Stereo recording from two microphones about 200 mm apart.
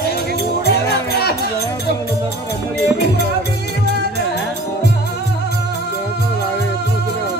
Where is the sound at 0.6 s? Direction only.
50° left (ahead or behind).